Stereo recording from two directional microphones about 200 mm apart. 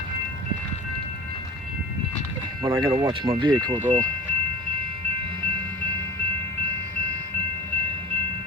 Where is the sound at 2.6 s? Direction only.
15° right (ahead or behind).